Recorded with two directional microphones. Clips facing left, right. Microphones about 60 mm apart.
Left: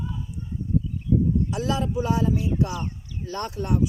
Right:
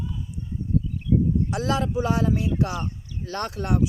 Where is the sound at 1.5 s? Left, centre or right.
Right.